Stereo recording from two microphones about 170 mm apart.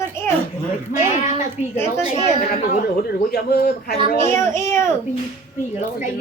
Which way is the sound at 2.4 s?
45° left (ahead or behind).